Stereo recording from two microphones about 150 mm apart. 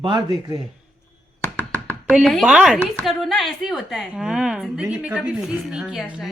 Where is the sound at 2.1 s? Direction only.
Centre (ahead or behind).